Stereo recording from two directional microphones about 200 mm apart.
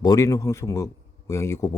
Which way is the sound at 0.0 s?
20° left (ahead or behind).